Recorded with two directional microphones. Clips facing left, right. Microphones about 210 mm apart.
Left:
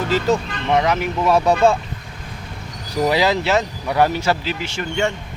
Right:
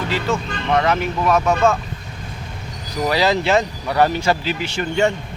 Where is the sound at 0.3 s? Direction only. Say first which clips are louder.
Left 4 dB; 40° left (ahead or behind).